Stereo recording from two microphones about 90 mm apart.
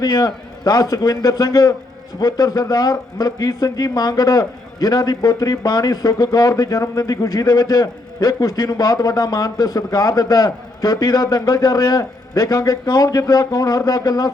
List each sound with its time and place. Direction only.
0.0 s a man's voice: 45° left (ahead or behind)